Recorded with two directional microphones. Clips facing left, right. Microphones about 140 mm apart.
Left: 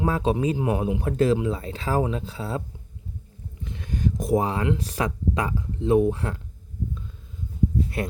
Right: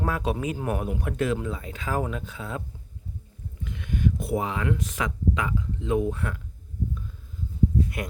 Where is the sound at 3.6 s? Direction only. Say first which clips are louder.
Even; 30° left (ahead or behind).